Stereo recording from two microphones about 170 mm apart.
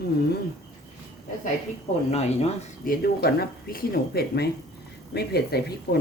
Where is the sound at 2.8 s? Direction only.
60° left (ahead or behind).